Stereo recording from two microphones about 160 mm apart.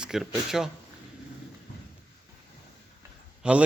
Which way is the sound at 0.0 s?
5° right (ahead or behind).